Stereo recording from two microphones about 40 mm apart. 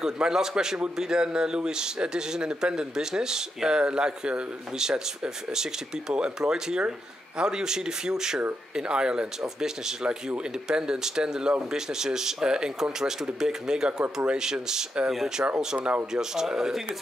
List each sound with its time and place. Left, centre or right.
0.0 s speech: centre